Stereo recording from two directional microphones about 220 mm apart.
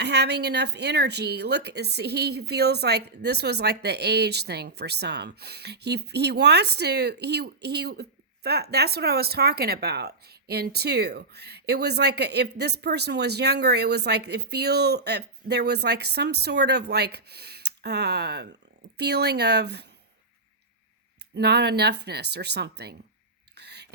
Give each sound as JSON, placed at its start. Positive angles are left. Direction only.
{"t": 0.0, "sound": "a woman's voice", "side_deg": -50}
{"t": 21.3, "sound": "a woman's voice", "side_deg": -50}
{"t": 23.6, "sound": "whispering", "side_deg": -50}